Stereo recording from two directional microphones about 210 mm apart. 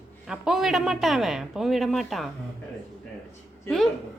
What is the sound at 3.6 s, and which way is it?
Speech, centre (ahead or behind).